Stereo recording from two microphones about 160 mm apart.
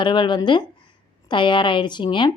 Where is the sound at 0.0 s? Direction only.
30° left (ahead or behind).